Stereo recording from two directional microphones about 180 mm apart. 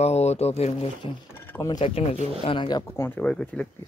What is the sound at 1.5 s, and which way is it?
Speech, 15° left (ahead or behind).